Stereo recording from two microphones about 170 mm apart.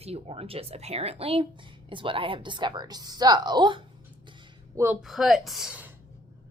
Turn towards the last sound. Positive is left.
turn(degrees=-5)  # may be behind; listen again after turning